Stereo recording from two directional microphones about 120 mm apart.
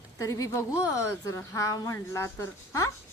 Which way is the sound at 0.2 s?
25° left (ahead or behind).